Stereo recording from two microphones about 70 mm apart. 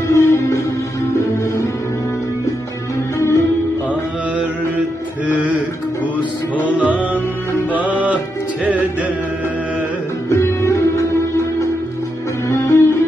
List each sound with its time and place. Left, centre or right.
0.1 s music: left
3.2 s music: left
7.7 s music: right
10.3 s music: left